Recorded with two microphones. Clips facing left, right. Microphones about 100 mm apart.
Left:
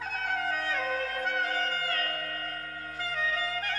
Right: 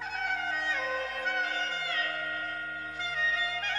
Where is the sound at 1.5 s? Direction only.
20° right (ahead or behind).